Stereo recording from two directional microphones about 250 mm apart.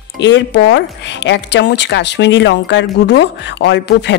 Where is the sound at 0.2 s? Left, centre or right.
Left.